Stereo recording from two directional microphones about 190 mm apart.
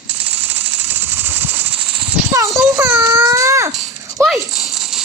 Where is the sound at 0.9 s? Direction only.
10° right (ahead or behind).